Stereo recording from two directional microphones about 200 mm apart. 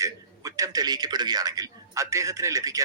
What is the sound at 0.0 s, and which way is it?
A man's voice, 15° right (ahead or behind).